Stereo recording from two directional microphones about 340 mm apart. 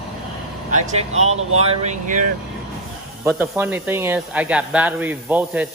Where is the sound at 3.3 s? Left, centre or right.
Centre.